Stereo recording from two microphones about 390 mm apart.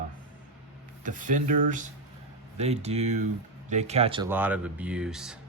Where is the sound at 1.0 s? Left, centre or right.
Centre.